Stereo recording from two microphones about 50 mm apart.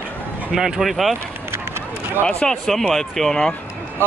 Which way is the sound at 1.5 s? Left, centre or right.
Right.